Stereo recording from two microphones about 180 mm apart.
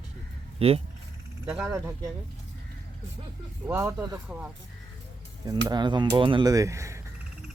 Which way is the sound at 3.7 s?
10° right (ahead or behind).